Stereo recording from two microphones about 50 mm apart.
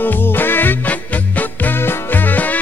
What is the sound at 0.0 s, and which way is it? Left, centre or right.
Music, left.